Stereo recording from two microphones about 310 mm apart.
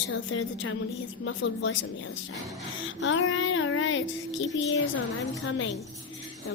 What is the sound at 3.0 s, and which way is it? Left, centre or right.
Child singing, left.